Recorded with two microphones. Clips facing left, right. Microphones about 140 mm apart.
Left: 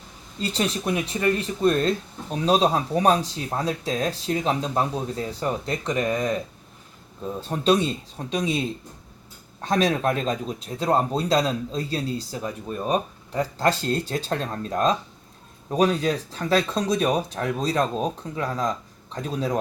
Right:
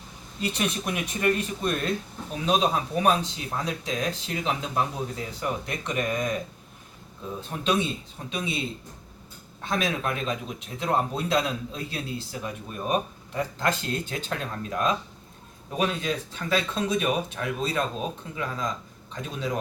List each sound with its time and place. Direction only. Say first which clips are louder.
0.4 s speech: left 3 dB; 30° left (ahead or behind)
2.4 s speech: left 4 dB; 35° left (ahead or behind)
7.4 s speech: left 5 dB; 35° left (ahead or behind)